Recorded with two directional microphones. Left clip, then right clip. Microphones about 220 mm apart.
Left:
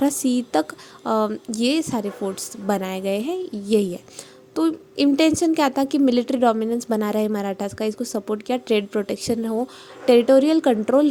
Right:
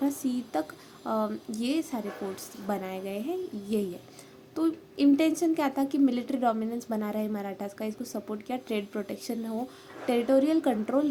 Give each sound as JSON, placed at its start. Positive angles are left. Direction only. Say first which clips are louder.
{"t": 0.0, "sound": "a woman's voice", "louder": "left 9 dB", "side_deg": 45}